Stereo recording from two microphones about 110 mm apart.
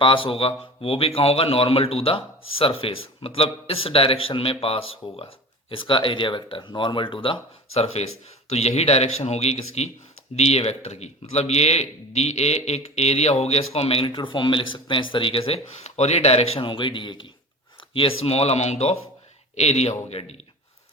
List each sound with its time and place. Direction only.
0.0 s a man's voice: 55° left (ahead or behind); by 16.6 s 70° left (ahead or behind)
16.6 s speech: 50° left (ahead or behind)
17.9 s speech: 60° left (ahead or behind)